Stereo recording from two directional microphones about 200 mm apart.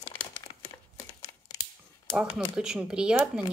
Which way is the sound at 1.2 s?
15° left (ahead or behind).